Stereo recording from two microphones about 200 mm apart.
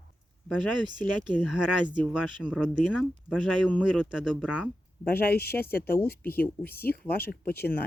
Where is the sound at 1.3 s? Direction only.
5° right (ahead or behind).